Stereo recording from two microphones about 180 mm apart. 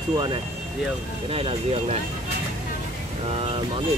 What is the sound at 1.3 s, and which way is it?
Speech, 30° right (ahead or behind).